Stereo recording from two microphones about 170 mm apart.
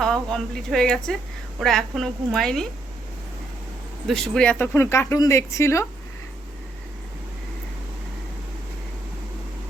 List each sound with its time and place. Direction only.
0.0 s a woman's voice: 5° left (ahead or behind)
4.0 s speech: 5° left (ahead or behind)